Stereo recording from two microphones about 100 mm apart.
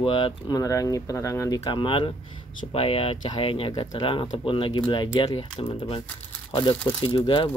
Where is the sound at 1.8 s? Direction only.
55° left (ahead or behind).